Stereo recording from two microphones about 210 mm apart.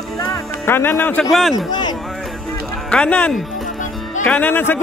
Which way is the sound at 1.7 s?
20° left (ahead or behind).